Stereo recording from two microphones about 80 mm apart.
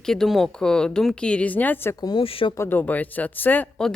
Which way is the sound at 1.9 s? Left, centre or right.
Left.